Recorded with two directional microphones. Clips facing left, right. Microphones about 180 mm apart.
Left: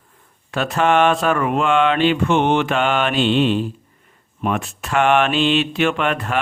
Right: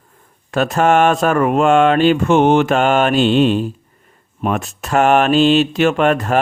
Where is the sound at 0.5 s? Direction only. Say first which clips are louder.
Right 3 dB; 45° right (ahead or behind).